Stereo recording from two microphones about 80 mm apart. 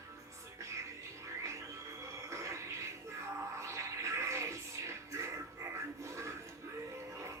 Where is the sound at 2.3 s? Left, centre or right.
Right.